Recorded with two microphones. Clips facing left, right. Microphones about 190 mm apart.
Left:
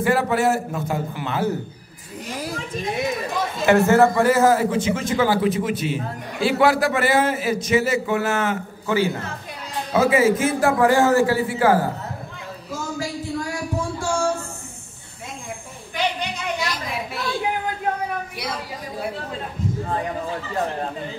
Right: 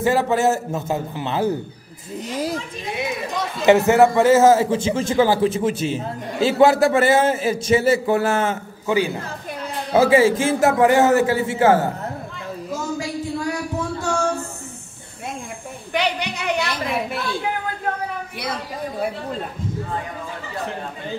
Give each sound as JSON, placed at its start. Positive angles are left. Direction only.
{"t": 0.0, "sound": "a man's voice", "side_deg": -25}
{"t": 3.6, "sound": "a man's voice", "side_deg": -20}
{"t": 8.8, "sound": "a man's voice", "side_deg": -15}
{"t": 9.9, "sound": "a man's voice", "side_deg": -30}
{"t": 15.9, "sound": "a sound", "side_deg": -75}